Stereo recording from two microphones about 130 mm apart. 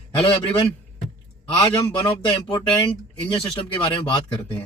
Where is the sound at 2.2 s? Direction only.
35° left (ahead or behind).